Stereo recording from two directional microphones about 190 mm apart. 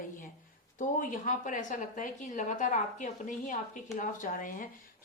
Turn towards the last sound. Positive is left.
turn(degrees=45)  # may be behind; listen again after turning